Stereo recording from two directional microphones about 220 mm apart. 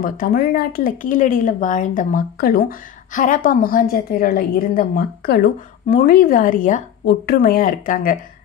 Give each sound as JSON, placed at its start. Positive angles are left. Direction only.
{"t": 0.0, "sound": "a woman's voice", "side_deg": 40}